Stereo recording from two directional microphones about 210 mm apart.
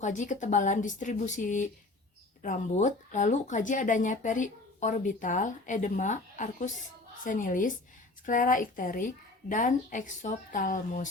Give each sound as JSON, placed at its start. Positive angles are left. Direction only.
{"t": 0.0, "sound": "speech", "side_deg": 35}